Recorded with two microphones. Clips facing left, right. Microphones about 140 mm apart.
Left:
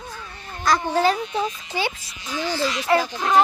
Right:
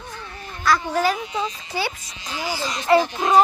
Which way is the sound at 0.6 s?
25° left (ahead or behind).